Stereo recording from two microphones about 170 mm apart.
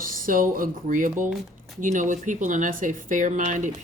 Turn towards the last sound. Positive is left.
turn(degrees=-50)  # may be behind; listen again after turning